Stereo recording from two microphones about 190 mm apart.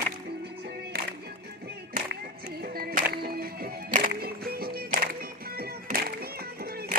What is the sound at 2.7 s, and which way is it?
Music, 50° right (ahead or behind).